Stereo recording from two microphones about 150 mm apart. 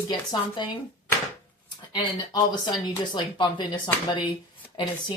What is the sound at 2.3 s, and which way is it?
Speech, 30° left (ahead or behind).